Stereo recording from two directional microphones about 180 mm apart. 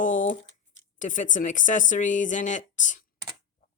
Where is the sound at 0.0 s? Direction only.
45° left (ahead or behind).